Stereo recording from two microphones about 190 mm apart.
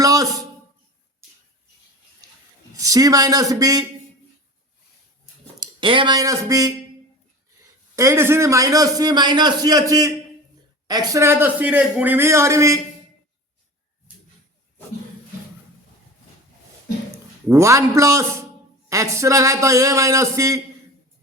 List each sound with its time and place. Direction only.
0.0 s a man's voice: 20° right (ahead or behind)
2.7 s a man's voice: 20° right (ahead or behind)
5.5 s speech: 25° right (ahead or behind)
7.9 s a man's voice: 15° right (ahead or behind)
17.5 s a man's voice: 15° right (ahead or behind)